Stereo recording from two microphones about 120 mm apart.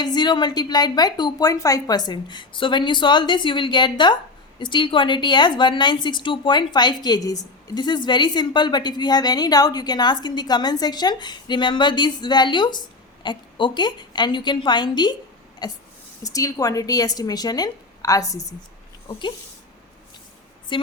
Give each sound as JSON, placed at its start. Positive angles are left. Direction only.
{"t": 0.0, "sound": "a woman's voice", "side_deg": 35}